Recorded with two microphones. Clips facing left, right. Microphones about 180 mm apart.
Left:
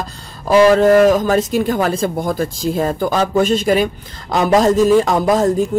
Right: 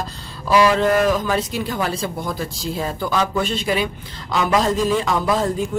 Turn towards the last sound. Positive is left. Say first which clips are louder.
# left 6 dB
turn(degrees=45)  # may be behind; listen again after turning